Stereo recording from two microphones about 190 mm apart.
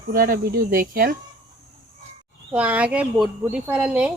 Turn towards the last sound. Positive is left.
turn(degrees=-5)  # may be behind; listen again after turning